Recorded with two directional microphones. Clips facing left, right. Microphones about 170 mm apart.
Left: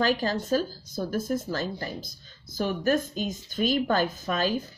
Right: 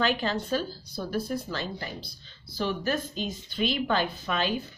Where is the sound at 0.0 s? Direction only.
40° left (ahead or behind).